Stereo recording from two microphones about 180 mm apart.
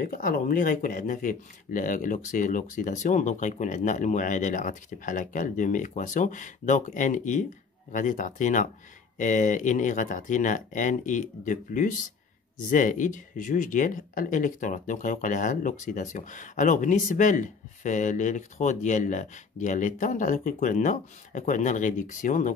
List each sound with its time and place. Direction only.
0.0 s speech: 50° left (ahead or behind)